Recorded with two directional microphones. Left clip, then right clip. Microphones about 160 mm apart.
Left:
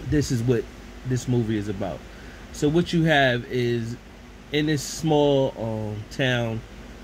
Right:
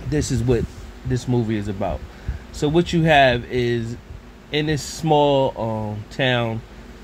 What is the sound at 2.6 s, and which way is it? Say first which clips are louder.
Speech: right 3 dB; 60° right (ahead or behind).